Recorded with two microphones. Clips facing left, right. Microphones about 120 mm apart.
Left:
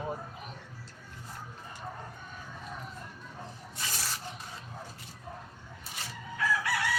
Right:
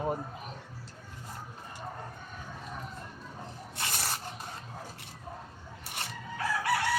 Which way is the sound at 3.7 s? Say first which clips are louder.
Right 3 dB; 60° right (ahead or behind).